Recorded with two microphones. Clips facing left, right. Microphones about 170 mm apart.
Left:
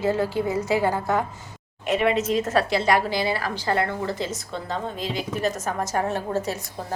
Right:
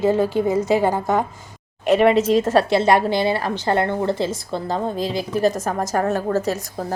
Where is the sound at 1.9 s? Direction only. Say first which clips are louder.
Right 7 dB; 35° right (ahead or behind).